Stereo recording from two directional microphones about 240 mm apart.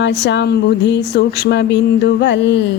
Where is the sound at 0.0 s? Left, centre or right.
Left.